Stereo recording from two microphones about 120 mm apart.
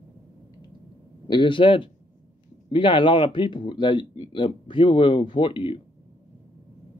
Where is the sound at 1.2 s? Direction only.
40° left (ahead or behind).